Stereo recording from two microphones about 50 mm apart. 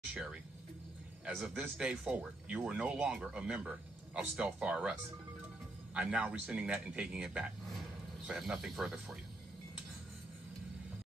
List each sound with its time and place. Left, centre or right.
0.1 s speech: centre
1.3 s a man's voice: centre
1.6 s speech: centre
2.1 s speech: right
3.1 s speech: centre
3.3 s speech: right
5.9 s speech: right
8.4 s speech: centre